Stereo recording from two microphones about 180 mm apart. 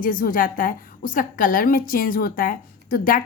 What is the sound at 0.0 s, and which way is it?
A woman's voice, 50° left (ahead or behind).